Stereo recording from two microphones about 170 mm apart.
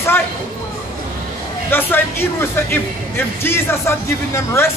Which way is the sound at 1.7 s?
10° left (ahead or behind).